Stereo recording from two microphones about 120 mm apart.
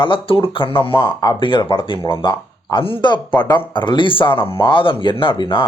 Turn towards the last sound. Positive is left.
turn(degrees=45)  # may be behind; listen again after turning